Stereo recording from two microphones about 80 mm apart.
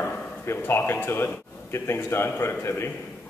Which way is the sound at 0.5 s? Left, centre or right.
Left.